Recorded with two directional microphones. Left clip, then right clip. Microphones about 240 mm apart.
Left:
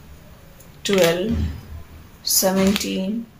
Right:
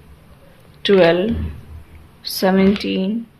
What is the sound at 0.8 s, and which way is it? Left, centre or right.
Speech, right.